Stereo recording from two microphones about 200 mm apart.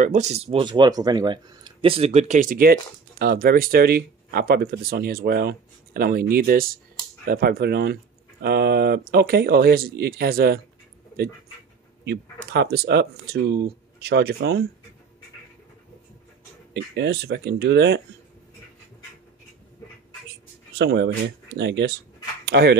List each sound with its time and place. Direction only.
0.0 s speech: 35° right (ahead or behind)
12.0 s speech: 55° right (ahead or behind)
16.9 s speech: 55° right (ahead or behind)
20.7 s speech: 60° right (ahead or behind)